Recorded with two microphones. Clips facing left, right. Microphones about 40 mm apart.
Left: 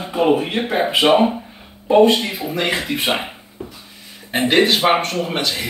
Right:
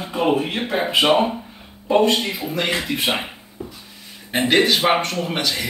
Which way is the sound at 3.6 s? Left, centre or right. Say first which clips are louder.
Left 1 dB; left.